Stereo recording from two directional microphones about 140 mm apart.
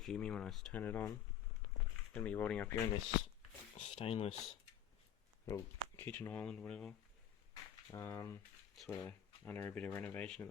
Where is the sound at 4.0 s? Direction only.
45° left (ahead or behind).